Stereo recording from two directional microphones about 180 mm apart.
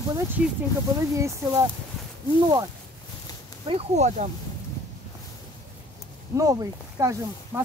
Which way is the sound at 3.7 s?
35° right (ahead or behind).